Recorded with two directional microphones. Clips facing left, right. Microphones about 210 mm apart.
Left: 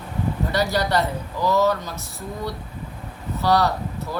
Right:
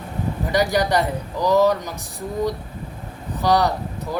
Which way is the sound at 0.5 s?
15° right (ahead or behind).